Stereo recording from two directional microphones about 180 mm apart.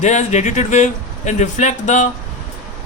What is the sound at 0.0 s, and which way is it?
Speech, 40° left (ahead or behind).